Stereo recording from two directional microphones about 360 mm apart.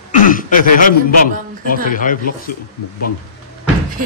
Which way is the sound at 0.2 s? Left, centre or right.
Left.